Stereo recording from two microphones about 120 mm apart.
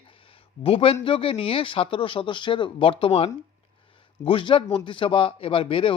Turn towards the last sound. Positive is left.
turn(degrees=45)  # may be behind; listen again after turning